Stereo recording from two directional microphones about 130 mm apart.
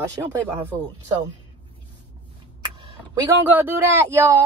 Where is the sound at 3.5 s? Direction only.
15° right (ahead or behind).